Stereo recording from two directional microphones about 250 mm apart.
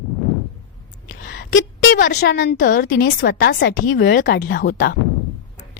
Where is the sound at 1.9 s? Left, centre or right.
Left.